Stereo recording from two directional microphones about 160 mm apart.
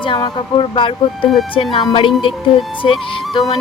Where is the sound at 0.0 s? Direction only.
30° left (ahead or behind).